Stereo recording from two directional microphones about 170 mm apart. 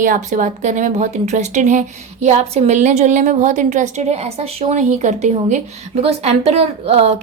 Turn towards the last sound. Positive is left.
turn(degrees=-40)  # may be behind; listen again after turning